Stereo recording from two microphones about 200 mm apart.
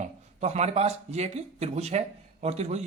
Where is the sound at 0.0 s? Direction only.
35° right (ahead or behind).